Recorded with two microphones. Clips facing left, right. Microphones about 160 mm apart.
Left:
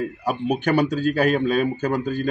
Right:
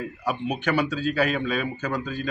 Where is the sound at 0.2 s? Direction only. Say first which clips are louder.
Left 3 dB; 40° left (ahead or behind).